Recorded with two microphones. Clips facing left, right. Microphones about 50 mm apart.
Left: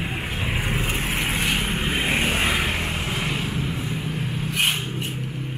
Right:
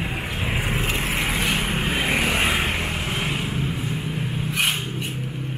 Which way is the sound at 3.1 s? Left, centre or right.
Centre.